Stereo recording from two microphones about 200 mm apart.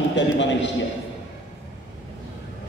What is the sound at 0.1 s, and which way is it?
Speech, 65° left (ahead or behind).